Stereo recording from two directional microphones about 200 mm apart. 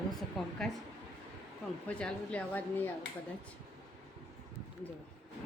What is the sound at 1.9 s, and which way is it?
A woman's voice, 5° left (ahead or behind).